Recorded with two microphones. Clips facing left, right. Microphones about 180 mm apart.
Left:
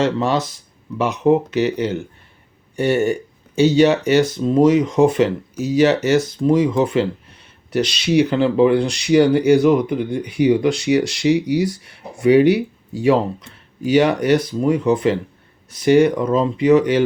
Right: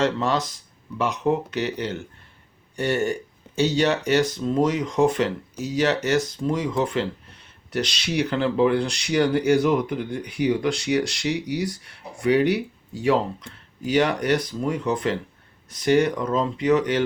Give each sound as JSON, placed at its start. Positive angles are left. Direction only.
{"t": 0.0, "sound": "speech", "side_deg": 5}
{"t": 1.1, "sound": "speech", "side_deg": 25}
{"t": 1.5, "sound": "speech", "side_deg": 5}
{"t": 9.7, "sound": "speech", "side_deg": 20}
{"t": 10.2, "sound": "speech", "side_deg": 0}